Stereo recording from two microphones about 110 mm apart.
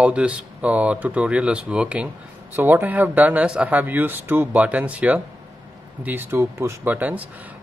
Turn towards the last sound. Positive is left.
turn(degrees=-15)  # may be behind; listen again after turning